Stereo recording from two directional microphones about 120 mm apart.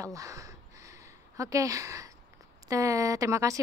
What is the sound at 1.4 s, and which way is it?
Speech, 30° right (ahead or behind).